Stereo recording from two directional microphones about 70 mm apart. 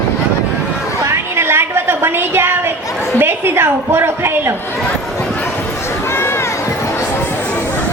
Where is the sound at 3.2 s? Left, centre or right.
Right.